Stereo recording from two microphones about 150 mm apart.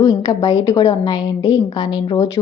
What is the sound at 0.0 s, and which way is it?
A woman's voice, 25° left (ahead or behind).